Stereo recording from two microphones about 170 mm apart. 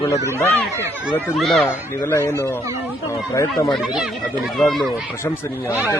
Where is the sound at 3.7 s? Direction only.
5° right (ahead or behind).